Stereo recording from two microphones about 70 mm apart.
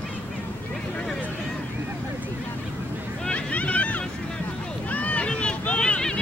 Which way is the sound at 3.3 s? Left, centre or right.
Centre.